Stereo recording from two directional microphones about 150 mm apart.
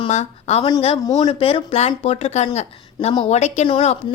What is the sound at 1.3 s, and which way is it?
A woman's voice, 40° left (ahead or behind).